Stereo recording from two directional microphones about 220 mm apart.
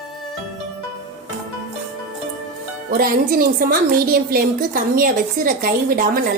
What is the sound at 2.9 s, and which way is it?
A woman's voice, 40° right (ahead or behind).